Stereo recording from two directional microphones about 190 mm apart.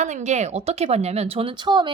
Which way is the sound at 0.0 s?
40° right (ahead or behind).